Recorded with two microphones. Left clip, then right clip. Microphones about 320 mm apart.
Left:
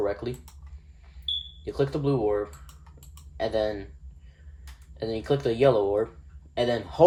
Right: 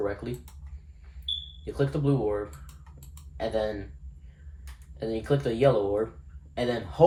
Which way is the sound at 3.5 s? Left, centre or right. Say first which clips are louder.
Left 2 dB; left.